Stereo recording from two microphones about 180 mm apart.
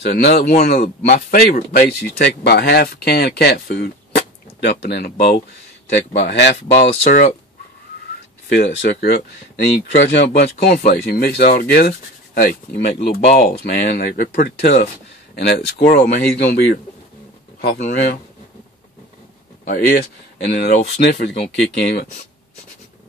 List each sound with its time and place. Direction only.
0.0 s speech: 55° left (ahead or behind)
8.5 s speech: 70° left (ahead or behind)
17.7 s speech: 45° left (ahead or behind)
19.6 s speech: 55° left (ahead or behind)